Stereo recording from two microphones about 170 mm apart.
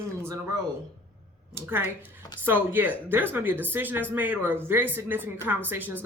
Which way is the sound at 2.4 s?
10° right (ahead or behind).